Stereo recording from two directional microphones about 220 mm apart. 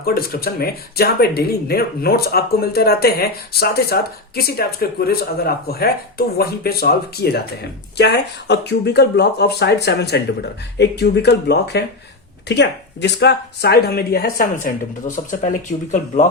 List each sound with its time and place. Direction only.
0.0 s speech: 45° left (ahead or behind)